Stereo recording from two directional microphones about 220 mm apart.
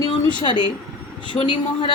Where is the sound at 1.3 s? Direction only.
25° left (ahead or behind).